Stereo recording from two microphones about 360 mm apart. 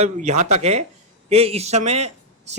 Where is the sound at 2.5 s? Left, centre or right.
Centre.